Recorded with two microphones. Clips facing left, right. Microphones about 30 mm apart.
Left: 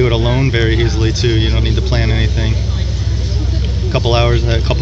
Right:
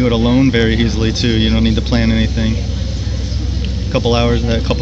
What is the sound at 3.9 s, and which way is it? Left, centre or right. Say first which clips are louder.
Speech: even; centre.